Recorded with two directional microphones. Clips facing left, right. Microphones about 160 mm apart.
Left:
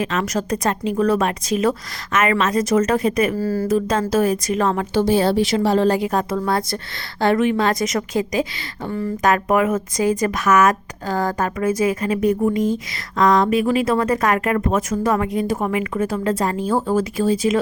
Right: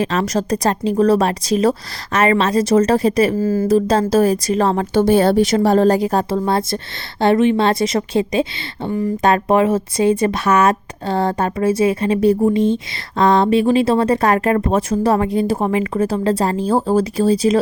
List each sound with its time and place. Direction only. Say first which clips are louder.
0.0 s a woman's voice: right 3 dB; 35° right (ahead or behind)
3.4 s speech: right 4 dB; 20° right (ahead or behind)
3.7 s a woman's voice: right 5 dB; 35° right (ahead or behind)
4.9 s speech: right 4 dB; 50° right (ahead or behind); by 17.6 s 35° right (ahead or behind)